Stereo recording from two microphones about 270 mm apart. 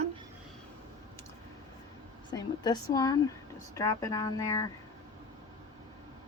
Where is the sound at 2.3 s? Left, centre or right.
Centre.